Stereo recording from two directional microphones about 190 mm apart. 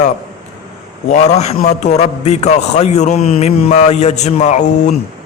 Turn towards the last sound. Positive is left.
turn(degrees=40)  # may be behind; listen again after turning